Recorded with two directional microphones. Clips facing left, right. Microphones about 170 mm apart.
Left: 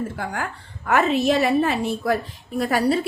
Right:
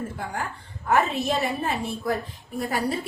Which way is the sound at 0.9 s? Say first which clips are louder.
Left 4 dB; 90° left.